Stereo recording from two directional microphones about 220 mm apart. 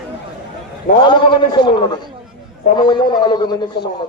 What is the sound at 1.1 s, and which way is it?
A man's voice, 20° left (ahead or behind).